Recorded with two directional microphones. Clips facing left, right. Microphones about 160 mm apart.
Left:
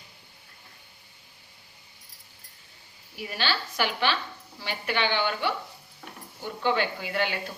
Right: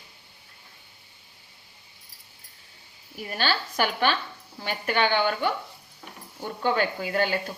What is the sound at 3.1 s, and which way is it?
A woman's voice, 45° right (ahead or behind).